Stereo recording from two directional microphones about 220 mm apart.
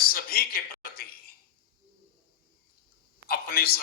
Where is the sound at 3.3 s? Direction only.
45° left (ahead or behind).